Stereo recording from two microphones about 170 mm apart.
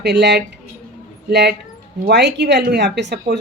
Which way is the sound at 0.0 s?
85° right.